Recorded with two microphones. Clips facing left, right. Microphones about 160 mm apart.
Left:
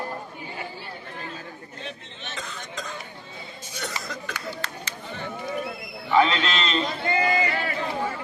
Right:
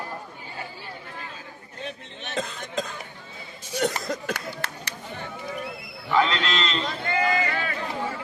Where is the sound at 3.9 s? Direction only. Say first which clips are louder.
Right 5 dB; 45° right (ahead or behind).